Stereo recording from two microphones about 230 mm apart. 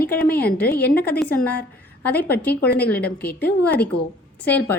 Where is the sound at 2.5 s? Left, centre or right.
Left.